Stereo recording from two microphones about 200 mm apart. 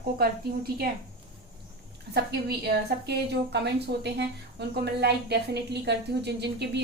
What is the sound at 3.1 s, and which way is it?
A woman's voice, 55° right (ahead or behind).